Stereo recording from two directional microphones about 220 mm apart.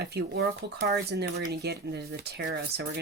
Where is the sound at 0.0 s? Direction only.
50° right (ahead or behind).